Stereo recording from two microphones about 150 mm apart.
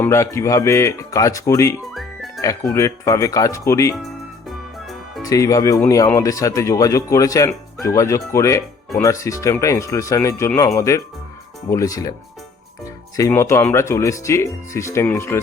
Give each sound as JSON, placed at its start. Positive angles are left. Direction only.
{"t": 0.0, "sound": "speech", "side_deg": 20}
{"t": 1.9, "sound": "music", "side_deg": 0}
{"t": 2.4, "sound": "speech", "side_deg": 25}
{"t": 4.4, "sound": "music", "side_deg": 0}
{"t": 5.2, "sound": "speech", "side_deg": 25}
{"t": 13.1, "sound": "speech", "side_deg": 20}